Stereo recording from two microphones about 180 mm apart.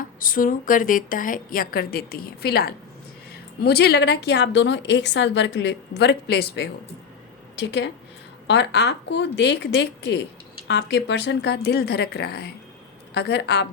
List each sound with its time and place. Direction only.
0.2 s a woman's voice: 50° left (ahead or behind)
7.5 s a woman's voice: 75° left (ahead or behind)